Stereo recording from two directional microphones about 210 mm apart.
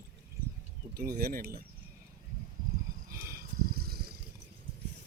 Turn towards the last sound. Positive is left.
turn(degrees=-45)  # may be behind; listen again after turning